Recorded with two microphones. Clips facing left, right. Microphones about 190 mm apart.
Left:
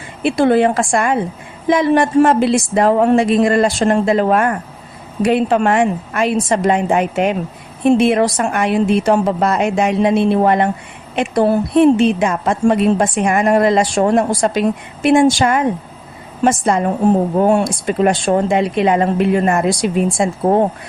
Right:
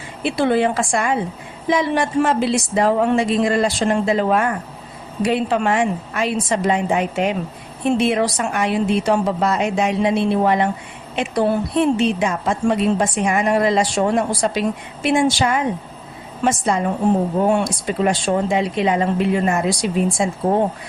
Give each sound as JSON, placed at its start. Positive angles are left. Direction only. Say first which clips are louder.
{"t": 0.2, "sound": "a woman's voice", "louder": "left 5 dB", "side_deg": 50}